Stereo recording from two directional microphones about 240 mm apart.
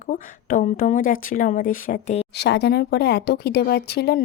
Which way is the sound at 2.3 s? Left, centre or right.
Left.